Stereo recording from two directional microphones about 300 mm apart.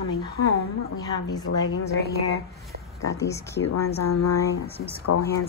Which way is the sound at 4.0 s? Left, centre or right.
Left.